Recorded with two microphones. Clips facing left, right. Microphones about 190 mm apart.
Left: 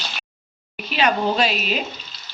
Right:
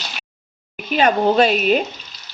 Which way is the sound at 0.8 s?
50° right (ahead or behind).